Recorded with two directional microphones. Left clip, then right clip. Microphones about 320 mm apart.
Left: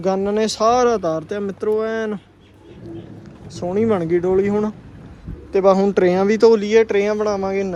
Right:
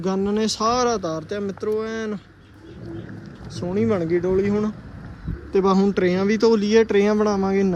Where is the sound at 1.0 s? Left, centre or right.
Left.